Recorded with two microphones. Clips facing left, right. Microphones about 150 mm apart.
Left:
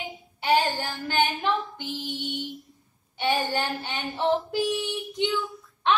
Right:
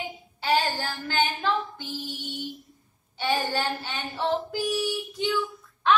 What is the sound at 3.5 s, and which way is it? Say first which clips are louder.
Child singing: even; 15° left (ahead or behind).